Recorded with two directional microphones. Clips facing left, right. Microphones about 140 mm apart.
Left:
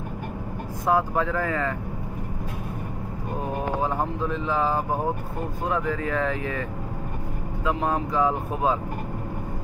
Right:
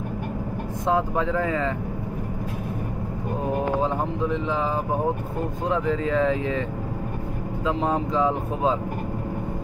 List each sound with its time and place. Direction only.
0.8 s speech: 20° right (ahead or behind)
4.3 s speech: 20° right (ahead or behind)
5.7 s speech: 20° right (ahead or behind)
7.6 s speech: 25° right (ahead or behind)